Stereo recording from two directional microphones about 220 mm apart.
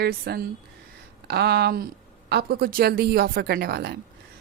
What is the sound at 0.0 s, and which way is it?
Speech, 45° right (ahead or behind).